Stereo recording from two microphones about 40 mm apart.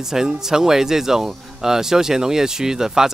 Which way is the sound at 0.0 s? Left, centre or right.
Centre.